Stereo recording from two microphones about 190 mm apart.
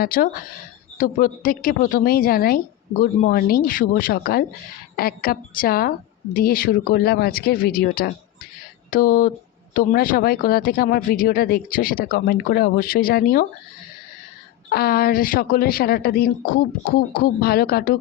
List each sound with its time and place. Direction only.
0.0 s speech: 50° left (ahead or behind)
14.7 s speech: 55° left (ahead or behind)